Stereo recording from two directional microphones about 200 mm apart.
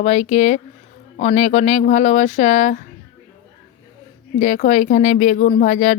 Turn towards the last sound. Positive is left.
turn(degrees=40)  # may be behind; listen again after turning